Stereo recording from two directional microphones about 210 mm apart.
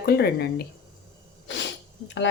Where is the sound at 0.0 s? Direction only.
50° left (ahead or behind).